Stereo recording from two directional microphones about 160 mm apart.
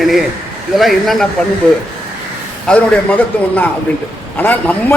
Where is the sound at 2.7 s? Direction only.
10° left (ahead or behind).